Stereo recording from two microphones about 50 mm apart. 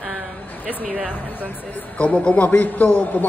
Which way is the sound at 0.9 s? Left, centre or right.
Right.